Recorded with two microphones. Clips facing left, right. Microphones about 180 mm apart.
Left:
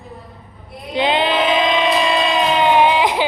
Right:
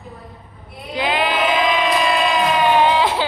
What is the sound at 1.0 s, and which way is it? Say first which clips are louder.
Child singing: left 3 dB; 25° left (ahead or behind).